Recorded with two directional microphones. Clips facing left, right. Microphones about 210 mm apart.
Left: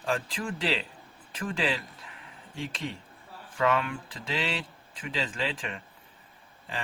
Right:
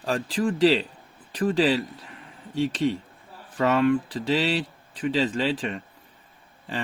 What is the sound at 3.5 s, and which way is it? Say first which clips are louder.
Speech: right 7 dB; 35° right (ahead or behind).